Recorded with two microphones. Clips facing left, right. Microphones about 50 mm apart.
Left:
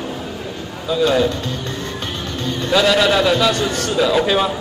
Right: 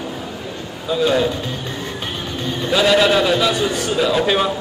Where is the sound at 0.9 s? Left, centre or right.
Centre.